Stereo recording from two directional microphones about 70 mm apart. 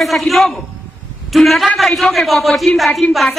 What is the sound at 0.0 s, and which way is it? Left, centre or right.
A woman's voice, centre.